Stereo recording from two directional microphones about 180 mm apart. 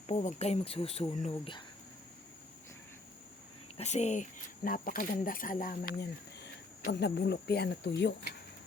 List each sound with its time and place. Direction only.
0.1 s speech: 40° left (ahead or behind)
3.8 s speech: 40° left (ahead or behind); by 8.1 s 70° left (ahead or behind)